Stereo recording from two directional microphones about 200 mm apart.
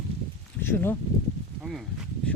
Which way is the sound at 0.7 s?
10° left (ahead or behind).